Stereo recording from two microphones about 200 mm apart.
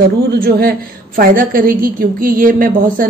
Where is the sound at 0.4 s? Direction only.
50° right (ahead or behind).